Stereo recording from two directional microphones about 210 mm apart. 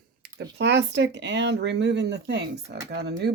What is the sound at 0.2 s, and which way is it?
Speech, 55° right (ahead or behind).